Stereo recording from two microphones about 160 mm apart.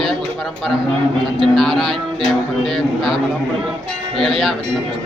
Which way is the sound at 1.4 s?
Centre (ahead or behind).